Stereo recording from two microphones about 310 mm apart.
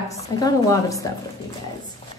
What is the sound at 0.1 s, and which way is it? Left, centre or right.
Speech, centre.